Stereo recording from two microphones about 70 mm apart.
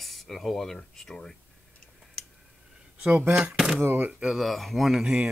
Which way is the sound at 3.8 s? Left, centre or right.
Right.